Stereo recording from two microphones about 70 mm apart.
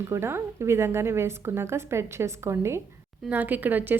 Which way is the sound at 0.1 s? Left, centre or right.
Right.